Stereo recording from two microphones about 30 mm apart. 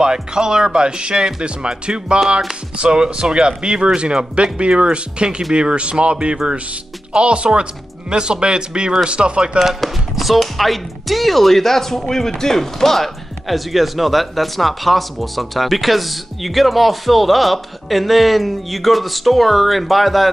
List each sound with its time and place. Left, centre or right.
0.0 s speech: right
0.8 s speech: right
9.8 s speech: centre